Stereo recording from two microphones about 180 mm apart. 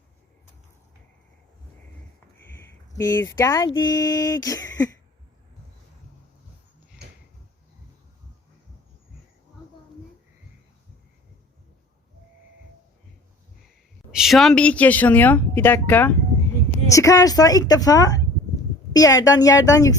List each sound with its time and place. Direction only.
2.9 s a woman's voice: 20° left (ahead or behind)
14.1 s a woman's voice: centre (ahead or behind); by 19.9 s 20° left (ahead or behind)